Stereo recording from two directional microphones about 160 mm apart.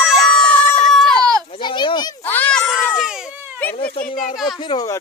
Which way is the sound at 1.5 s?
30° left (ahead or behind).